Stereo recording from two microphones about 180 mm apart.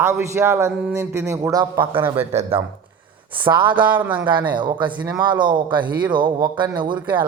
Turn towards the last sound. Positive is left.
turn(degrees=-10)  # may be behind; listen again after turning